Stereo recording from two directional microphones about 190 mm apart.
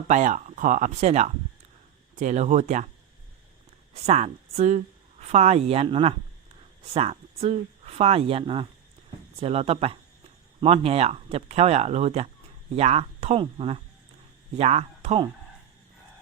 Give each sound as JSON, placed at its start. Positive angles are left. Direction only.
{"t": 0.1, "sound": "speech", "side_deg": -40}
{"t": 4.0, "sound": "speech", "side_deg": -35}